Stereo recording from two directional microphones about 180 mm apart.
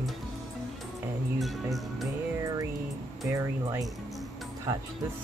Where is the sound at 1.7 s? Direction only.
Centre (ahead or behind).